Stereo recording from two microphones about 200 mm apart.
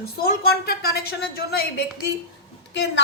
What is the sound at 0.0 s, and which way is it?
A woman's voice, 50° left (ahead or behind).